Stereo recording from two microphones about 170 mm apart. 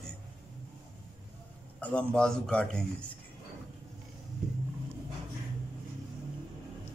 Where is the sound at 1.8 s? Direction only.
5° left (ahead or behind).